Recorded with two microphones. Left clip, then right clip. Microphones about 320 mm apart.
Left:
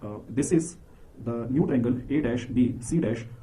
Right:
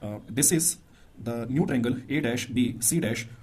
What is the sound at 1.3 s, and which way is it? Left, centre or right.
Speech, right.